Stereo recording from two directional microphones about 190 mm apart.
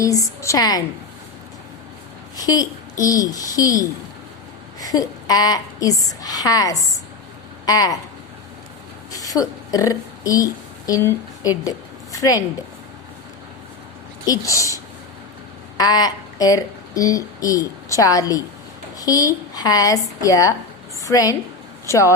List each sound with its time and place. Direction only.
0.0 s a woman's voice: 20° left (ahead or behind)
2.3 s a woman's voice: 20° left (ahead or behind)
9.1 s a woman's voice: 20° left (ahead or behind)
14.3 s speech: 15° left (ahead or behind)
15.8 s a woman's voice: 20° left (ahead or behind)